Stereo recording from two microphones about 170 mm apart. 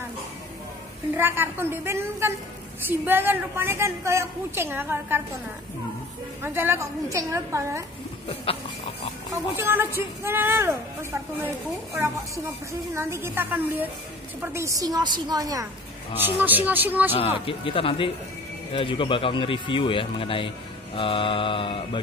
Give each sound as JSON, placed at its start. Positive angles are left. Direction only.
{"t": 1.1, "sound": "a woman's voice", "side_deg": -15}
{"t": 6.4, "sound": "a woman's voice", "side_deg": -15}
{"t": 9.3, "sound": "a woman's voice", "side_deg": -15}
{"t": 12.9, "sound": "a woman's voice", "side_deg": -15}
{"t": 16.3, "sound": "a woman's voice", "side_deg": -10}
{"t": 17.1, "sound": "speech", "side_deg": 35}